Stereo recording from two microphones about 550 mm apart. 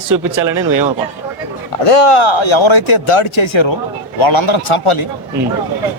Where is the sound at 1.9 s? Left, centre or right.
Left.